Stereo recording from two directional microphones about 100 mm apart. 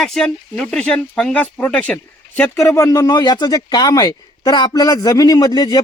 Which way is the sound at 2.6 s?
30° left (ahead or behind).